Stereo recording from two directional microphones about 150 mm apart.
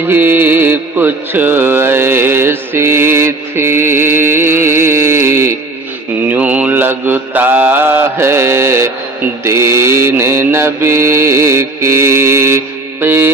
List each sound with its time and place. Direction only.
0.1 s mantra: 15° right (ahead or behind)